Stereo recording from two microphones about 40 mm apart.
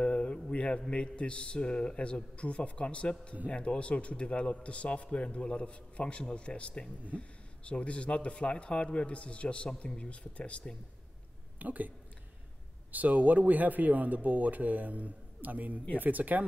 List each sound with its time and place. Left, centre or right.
0.0 s a man's voice: left
11.6 s a man's voice: right
12.9 s a man's voice: right